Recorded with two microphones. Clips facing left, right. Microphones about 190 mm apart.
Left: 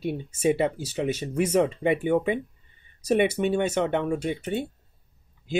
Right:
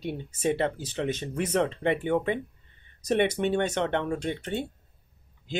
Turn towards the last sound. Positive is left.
turn(degrees=10)  # may be behind; listen again after turning